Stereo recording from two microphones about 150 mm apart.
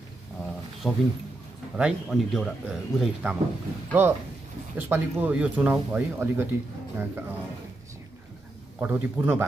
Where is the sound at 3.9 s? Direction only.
15° right (ahead or behind).